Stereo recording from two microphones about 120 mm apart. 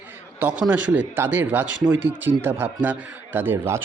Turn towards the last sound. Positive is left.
turn(degrees=-20)  # may be behind; listen again after turning